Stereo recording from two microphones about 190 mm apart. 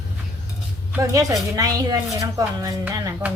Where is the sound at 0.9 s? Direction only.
15° right (ahead or behind).